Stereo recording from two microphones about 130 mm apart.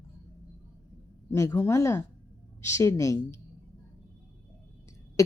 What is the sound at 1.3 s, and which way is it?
Speech, 25° left (ahead or behind).